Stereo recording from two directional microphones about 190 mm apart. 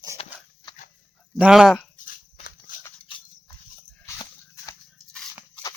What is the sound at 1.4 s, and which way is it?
Speech, 5° right (ahead or behind).